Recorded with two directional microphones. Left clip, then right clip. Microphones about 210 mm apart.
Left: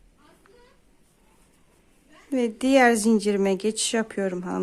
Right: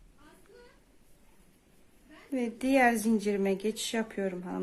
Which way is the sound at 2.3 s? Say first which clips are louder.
Left 8 dB; 30° left (ahead or behind).